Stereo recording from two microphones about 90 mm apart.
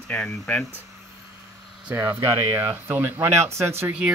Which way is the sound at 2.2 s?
55° right (ahead or behind).